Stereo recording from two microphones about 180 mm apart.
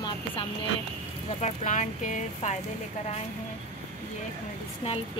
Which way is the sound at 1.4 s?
40° left (ahead or behind).